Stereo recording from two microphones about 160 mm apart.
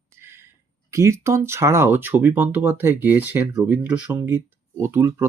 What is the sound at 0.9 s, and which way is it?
Speech, 20° right (ahead or behind).